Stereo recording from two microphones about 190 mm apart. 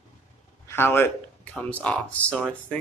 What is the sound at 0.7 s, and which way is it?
Speech, 10° left (ahead or behind).